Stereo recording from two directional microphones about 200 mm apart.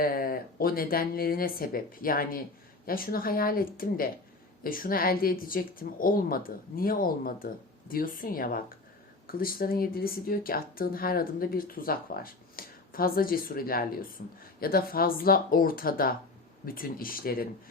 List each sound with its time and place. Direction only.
0.0 s speech: 45° left (ahead or behind)